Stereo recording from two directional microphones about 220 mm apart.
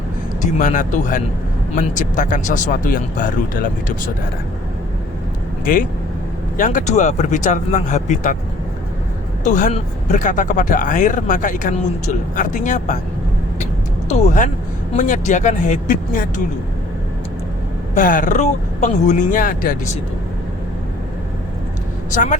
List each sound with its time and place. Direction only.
0.4 s speech: 35° left (ahead or behind)
6.6 s speech: 35° left (ahead or behind)
9.4 s speech: 35° left (ahead or behind)
14.1 s speech: 35° left (ahead or behind)
17.9 s speech: 35° left (ahead or behind)
22.1 s speech: 35° left (ahead or behind)